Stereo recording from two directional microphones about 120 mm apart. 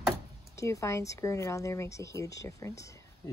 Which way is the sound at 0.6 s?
25° left (ahead or behind).